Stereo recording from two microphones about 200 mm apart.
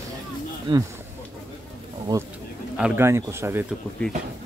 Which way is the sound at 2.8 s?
15° right (ahead or behind).